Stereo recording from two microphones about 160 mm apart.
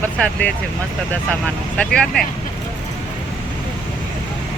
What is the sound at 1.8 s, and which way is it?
Speech, 5° left (ahead or behind).